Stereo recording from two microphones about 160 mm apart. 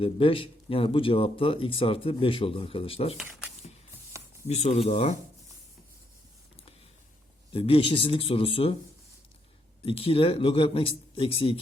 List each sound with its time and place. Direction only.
0.0 s speech: 35° left (ahead or behind)
4.4 s speech: 45° left (ahead or behind)
7.5 s speech: 35° left (ahead or behind)
9.8 s speech: 35° left (ahead or behind)